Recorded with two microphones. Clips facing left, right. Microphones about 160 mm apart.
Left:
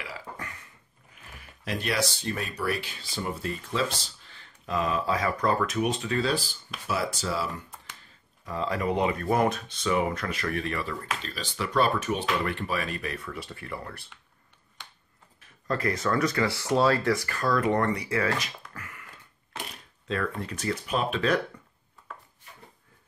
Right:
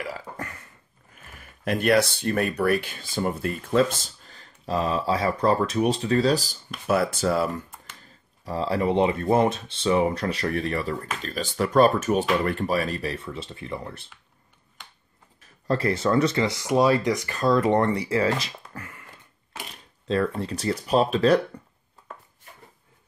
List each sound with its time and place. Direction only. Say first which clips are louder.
0.0 s burping: right 6 dB; 45° right (ahead or behind)
1.6 s speech: right 8 dB; 55° right (ahead or behind)
6.9 s speech: right 7 dB; 55° right (ahead or behind)
8.5 s speech: right 4 dB; 30° right (ahead or behind)
15.6 s speech: right 4 dB; 30° right (ahead or behind)
20.1 s speech: right 6 dB; 30° right (ahead or behind)